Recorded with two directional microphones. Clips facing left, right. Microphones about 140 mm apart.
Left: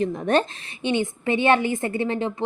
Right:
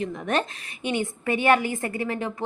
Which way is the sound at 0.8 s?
25° left (ahead or behind).